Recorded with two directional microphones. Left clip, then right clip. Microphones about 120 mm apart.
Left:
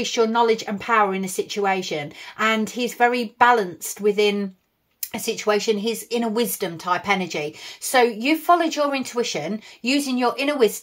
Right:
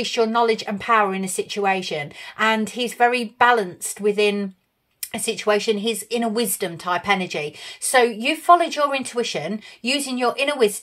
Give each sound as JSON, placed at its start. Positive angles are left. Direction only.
{"t": 0.0, "sound": "speech", "side_deg": -25}